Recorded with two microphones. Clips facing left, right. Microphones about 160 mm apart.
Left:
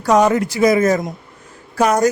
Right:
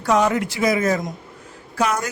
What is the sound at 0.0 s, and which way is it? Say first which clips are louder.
A man's voice: left 5 dB; 40° left (ahead or behind).